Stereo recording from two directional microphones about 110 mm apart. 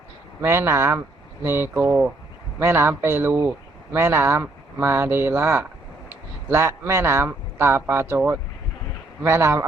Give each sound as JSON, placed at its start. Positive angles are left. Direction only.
{"t": 0.4, "sound": "speech", "side_deg": -20}